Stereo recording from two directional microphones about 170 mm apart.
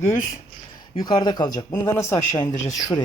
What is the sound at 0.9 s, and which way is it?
A woman's voice, 25° left (ahead or behind).